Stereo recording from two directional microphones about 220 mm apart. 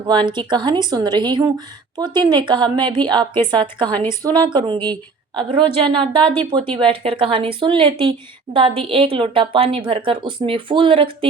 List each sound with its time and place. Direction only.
0.1 s a woman's voice: 20° right (ahead or behind)